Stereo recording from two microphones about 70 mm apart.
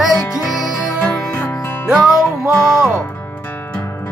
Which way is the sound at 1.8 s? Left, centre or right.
Centre.